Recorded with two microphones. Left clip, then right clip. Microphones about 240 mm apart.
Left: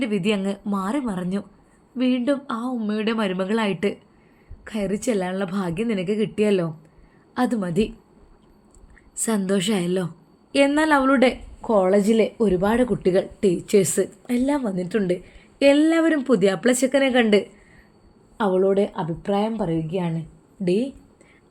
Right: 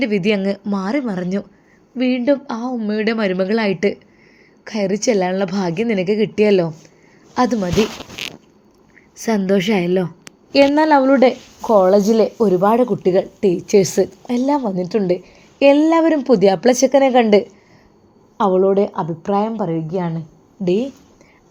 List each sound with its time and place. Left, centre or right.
0.0 s a woman's voice: centre
9.2 s a woman's voice: centre
11.8 s a woman's voice: centre
12.7 s a woman's voice: centre